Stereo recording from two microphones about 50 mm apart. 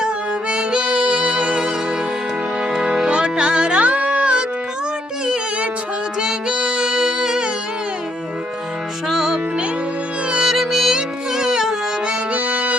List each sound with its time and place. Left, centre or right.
0.5 s music: centre
2.7 s music: centre
9.0 s music: centre
12.3 s music: right